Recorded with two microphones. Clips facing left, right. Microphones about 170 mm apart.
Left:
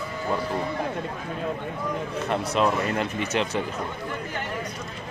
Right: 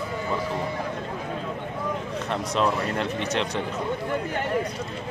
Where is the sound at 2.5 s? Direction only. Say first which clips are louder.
Even; 5° left (ahead or behind).